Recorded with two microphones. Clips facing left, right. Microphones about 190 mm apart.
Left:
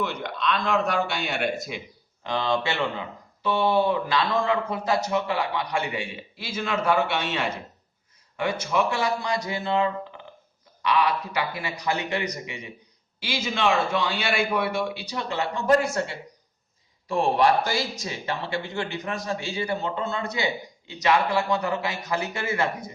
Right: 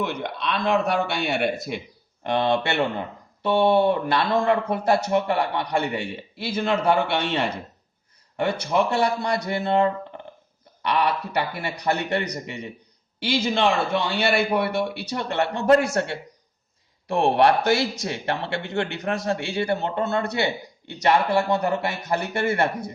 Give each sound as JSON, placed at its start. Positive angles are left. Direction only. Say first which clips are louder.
{"t": 0.0, "sound": "speech", "louder": "right 1 dB", "side_deg": -55}